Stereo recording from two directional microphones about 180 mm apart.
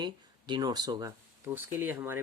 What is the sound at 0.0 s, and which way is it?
Speech, 25° right (ahead or behind).